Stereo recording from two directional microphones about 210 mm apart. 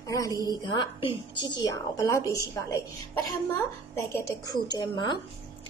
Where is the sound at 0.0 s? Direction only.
15° left (ahead or behind).